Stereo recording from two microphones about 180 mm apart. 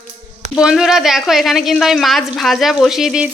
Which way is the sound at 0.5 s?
5° right (ahead or behind).